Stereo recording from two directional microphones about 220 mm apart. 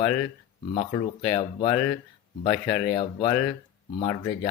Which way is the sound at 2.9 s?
20° left (ahead or behind).